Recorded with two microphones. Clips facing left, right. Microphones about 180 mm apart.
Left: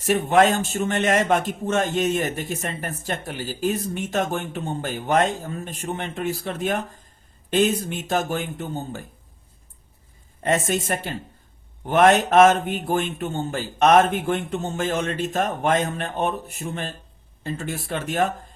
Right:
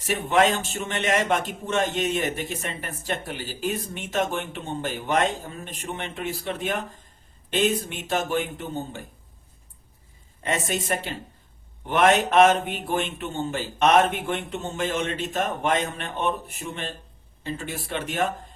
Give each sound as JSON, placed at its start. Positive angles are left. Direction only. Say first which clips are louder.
{"t": 0.0, "sound": "a man's voice", "louder": "left 4 dB", "side_deg": 50}
{"t": 10.4, "sound": "a man's voice", "louder": "left 5 dB", "side_deg": 45}